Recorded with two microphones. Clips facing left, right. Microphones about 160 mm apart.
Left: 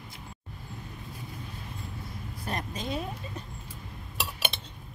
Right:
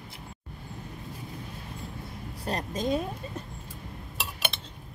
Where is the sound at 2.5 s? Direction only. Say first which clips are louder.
Right 5 dB; 40° right (ahead or behind).